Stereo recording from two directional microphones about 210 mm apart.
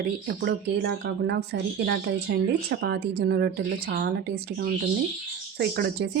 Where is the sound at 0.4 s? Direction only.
55° right (ahead or behind).